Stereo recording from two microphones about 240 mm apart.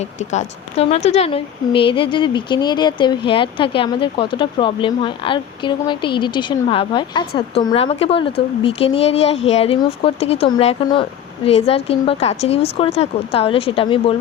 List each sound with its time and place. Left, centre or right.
0.0 s speech: left